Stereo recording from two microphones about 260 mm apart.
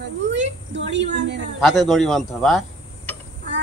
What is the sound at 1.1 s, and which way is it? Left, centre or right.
Speech, right.